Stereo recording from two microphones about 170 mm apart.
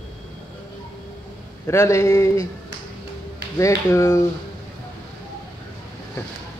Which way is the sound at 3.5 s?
20° left (ahead or behind).